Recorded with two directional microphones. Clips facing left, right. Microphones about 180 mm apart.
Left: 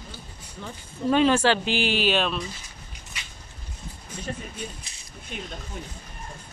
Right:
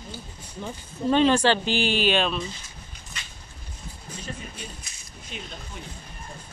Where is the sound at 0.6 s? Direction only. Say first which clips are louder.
Right 3 dB; 20° right (ahead or behind).